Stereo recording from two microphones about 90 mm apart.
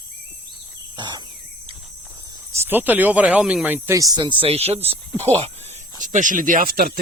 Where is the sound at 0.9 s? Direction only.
60° right (ahead or behind).